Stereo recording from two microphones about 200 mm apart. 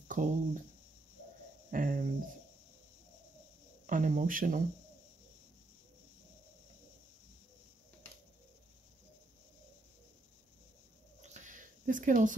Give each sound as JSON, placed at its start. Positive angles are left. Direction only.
{"t": 0.1, "sound": "speech", "side_deg": -40}
{"t": 1.7, "sound": "speech", "side_deg": -40}
{"t": 3.8, "sound": "speech", "side_deg": -40}
{"t": 11.1, "sound": "a sound", "side_deg": -40}